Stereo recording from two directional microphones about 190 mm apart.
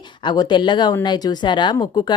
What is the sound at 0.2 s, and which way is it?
Speech, 25° left (ahead or behind).